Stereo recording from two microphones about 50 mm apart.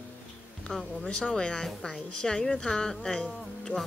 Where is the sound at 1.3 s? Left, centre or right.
Centre.